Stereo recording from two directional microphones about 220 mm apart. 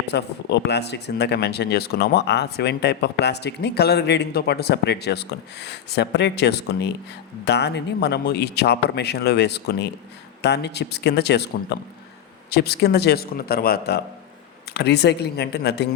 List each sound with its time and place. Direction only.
0.1 s speech: 50° left (ahead or behind)